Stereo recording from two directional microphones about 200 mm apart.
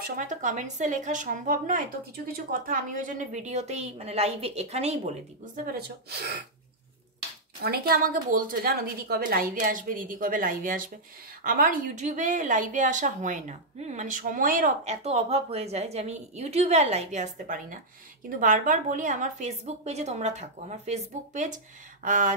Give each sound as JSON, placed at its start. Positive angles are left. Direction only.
{"t": 0.0, "sound": "speech", "side_deg": -40}
{"t": 7.6, "sound": "a woman's voice", "side_deg": -50}